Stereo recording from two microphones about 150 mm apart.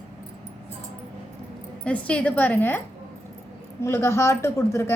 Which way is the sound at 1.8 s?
10° left (ahead or behind).